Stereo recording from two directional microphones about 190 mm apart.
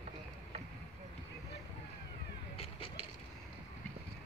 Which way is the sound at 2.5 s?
30° left (ahead or behind).